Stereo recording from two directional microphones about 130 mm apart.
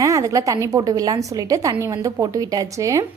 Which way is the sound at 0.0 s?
25° right (ahead or behind).